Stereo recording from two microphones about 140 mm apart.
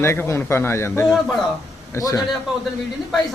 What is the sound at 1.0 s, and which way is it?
Speech, centre (ahead or behind).